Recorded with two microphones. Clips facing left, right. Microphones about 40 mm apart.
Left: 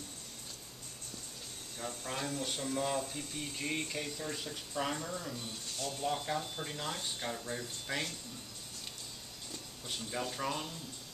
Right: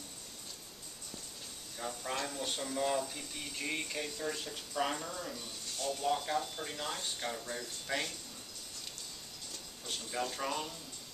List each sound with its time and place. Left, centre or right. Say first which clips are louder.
1.8 s speech: right 2 dB; centre
3.5 s speech: even; centre
9.8 s speech: right 1 dB; centre